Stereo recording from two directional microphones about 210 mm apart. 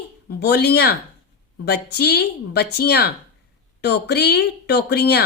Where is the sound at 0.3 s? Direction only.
50° left (ahead or behind).